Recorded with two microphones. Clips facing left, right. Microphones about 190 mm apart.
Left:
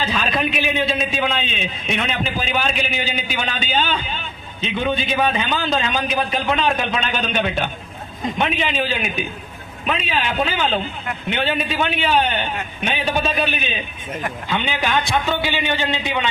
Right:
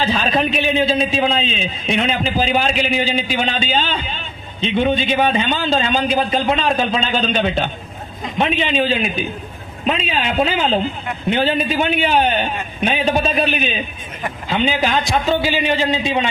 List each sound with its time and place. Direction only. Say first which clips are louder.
0.0 s a man's voice: right 4 dB; 35° right (ahead or behind)